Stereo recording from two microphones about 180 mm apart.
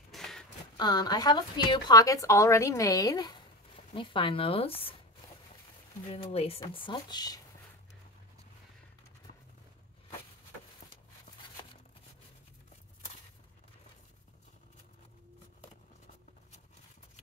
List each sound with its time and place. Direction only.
0.1 s a sound: centre (ahead or behind)
0.7 s a woman's voice: 25° left (ahead or behind)
6.0 s a woman's voice: 35° left (ahead or behind)